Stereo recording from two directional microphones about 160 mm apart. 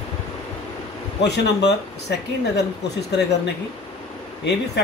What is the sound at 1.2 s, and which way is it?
Speech, 90° left.